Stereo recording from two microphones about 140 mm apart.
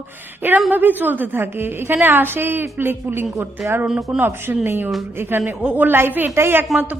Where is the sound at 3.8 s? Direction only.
Centre (ahead or behind).